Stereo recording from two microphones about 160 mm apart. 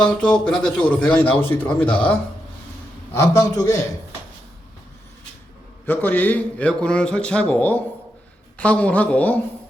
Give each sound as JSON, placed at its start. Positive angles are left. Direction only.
{"t": 0.0, "sound": "a man's voice", "side_deg": 5}
{"t": 5.8, "sound": "a man's voice", "side_deg": 10}